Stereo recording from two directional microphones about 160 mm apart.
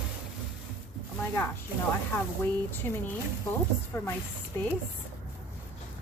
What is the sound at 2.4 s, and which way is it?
Speech, 10° left (ahead or behind).